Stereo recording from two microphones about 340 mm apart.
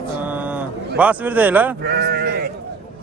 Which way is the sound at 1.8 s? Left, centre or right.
Right.